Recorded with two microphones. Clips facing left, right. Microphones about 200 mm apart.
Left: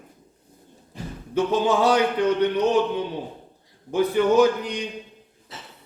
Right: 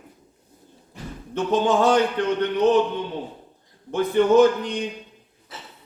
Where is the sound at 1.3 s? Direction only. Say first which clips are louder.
Even; 10° left (ahead or behind).